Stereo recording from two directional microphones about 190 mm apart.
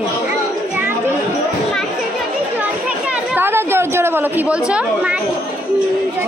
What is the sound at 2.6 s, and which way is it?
Speech, 5° right (ahead or behind).